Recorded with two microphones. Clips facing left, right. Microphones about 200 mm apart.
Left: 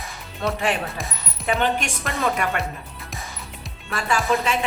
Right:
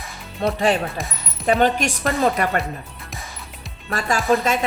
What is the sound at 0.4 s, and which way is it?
A woman's voice, 35° right (ahead or behind).